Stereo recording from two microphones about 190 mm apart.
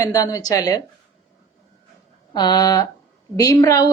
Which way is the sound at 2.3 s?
20° left (ahead or behind).